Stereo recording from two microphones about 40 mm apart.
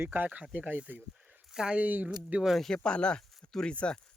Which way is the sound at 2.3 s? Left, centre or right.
Right.